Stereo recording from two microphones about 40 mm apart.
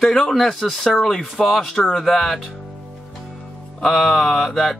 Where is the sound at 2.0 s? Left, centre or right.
Centre.